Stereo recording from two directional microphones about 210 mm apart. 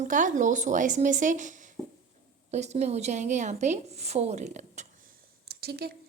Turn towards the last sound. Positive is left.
turn(degrees=-50)  # may be behind; listen again after turning